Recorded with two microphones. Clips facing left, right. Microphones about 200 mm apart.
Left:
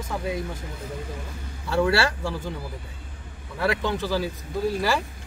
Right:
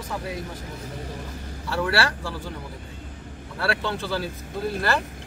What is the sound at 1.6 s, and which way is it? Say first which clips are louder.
Speech: left 3 dB; 25° left (ahead or behind).